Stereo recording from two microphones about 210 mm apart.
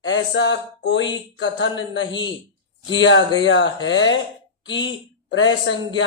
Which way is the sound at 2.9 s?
60° left (ahead or behind).